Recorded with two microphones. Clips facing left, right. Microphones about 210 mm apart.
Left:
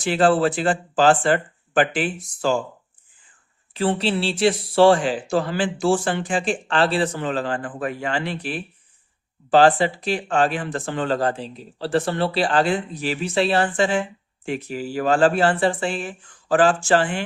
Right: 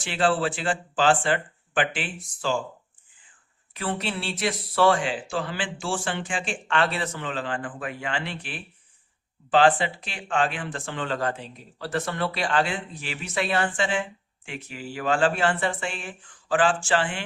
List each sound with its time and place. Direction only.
0.0 s speech: 40° left (ahead or behind)
3.8 s speech: 30° left (ahead or behind)